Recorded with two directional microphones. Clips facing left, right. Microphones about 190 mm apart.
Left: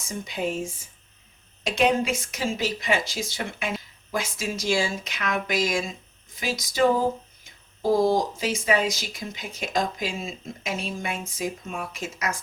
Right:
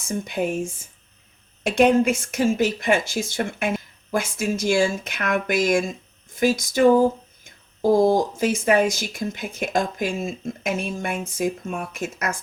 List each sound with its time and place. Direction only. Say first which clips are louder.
0.1 s speech: right 4 dB; 55° right (ahead or behind)